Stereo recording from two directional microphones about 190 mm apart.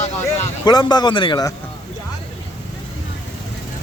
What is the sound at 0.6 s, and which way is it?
Speech, 20° left (ahead or behind).